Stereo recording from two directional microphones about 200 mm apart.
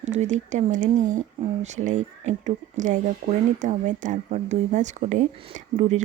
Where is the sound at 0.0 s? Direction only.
35° right (ahead or behind).